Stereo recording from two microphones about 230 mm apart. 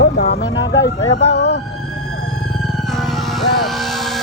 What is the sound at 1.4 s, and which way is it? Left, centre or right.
Emergency vehicle, left.